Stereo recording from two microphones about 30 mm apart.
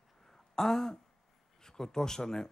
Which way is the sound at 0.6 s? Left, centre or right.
Centre.